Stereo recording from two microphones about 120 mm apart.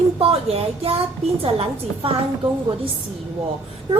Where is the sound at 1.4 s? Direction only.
50° right (ahead or behind).